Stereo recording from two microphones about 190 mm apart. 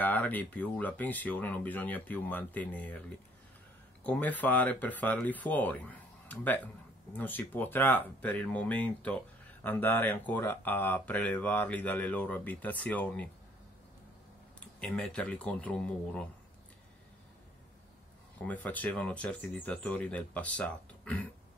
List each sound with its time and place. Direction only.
0.0 s speech: 10° left (ahead or behind)
4.0 s speech: 5° left (ahead or behind)
14.8 s speech: 5° left (ahead or behind)
18.4 s speech: 10° left (ahead or behind)